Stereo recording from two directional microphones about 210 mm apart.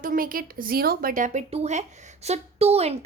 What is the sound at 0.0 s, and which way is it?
Speech, 40° right (ahead or behind).